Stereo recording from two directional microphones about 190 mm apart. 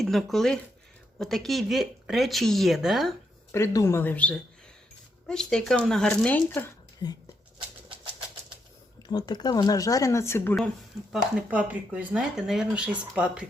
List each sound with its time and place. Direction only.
0.0 s speech: centre (ahead or behind)
3.5 s speech: 15° left (ahead or behind)
9.0 s speech: 20° left (ahead or behind)
11.1 s speech: 5° right (ahead or behind)